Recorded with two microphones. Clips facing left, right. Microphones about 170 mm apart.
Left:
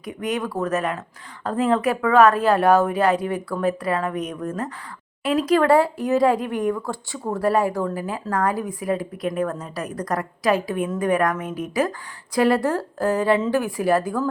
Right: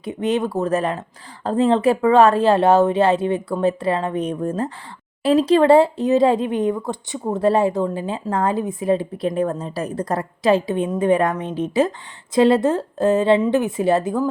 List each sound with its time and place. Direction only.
0.0 s speech: 25° right (ahead or behind)